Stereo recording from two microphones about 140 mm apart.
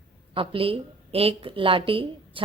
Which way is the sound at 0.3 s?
40° right (ahead or behind).